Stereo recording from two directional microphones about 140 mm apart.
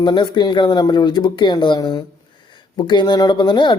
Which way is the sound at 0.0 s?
30° left (ahead or behind).